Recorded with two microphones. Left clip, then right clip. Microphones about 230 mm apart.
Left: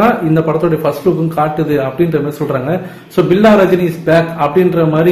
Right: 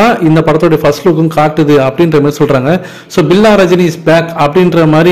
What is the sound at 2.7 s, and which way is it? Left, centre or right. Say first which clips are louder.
A man's voice: right 6 dB; right.